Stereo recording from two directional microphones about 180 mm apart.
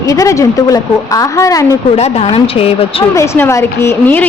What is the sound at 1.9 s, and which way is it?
A woman's voice, 35° left (ahead or behind).